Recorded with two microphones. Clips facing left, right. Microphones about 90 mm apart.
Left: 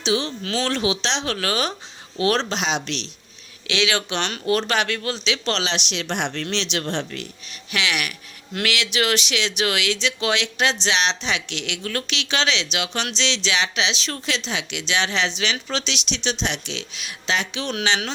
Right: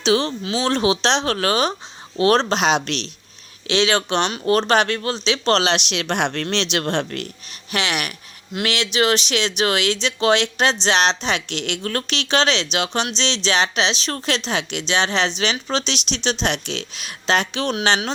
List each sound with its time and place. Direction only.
0.4 s speech: 15° right (ahead or behind)
0.7 s speech: 40° right (ahead or behind)
2.6 s speech: 55° right (ahead or behind)
3.7 s speech: 35° right (ahead or behind)
5.5 s speech: 55° right (ahead or behind)
7.7 s speech: 35° right (ahead or behind)